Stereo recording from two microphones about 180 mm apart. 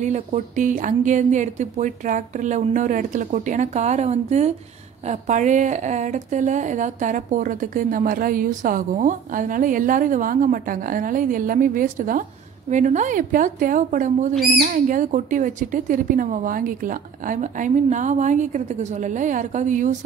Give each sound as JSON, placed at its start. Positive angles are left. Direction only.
{"t": 0.0, "sound": "a woman's voice", "side_deg": -40}